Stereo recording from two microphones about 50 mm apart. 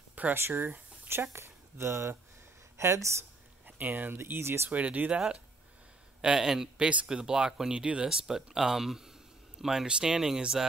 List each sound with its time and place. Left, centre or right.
0.3 s speech: right
3.6 s speech: right
4.3 s speech: right
4.6 s speech: right
6.2 s speech: centre
8.3 s speech: centre